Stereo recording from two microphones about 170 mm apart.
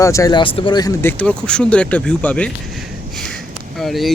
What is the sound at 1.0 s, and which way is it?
Speech, 5° left (ahead or behind).